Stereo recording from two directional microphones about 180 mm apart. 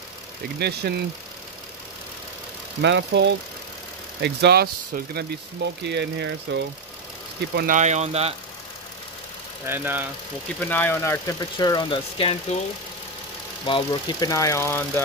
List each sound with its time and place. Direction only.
0.6 s speech: 65° right (ahead or behind)
2.8 s speech: 75° right (ahead or behind)
7.5 s speech: 45° right (ahead or behind)
9.7 s speech: 10° right (ahead or behind)
10.6 s speech: 10° left (ahead or behind); by 12.5 s 30° left (ahead or behind)
13.7 s speech: 25° left (ahead or behind)